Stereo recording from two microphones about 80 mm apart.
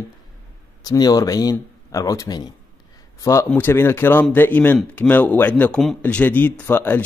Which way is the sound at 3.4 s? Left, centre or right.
Left.